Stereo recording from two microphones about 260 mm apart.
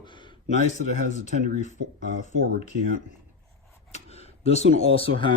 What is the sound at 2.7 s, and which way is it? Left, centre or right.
Speech, right.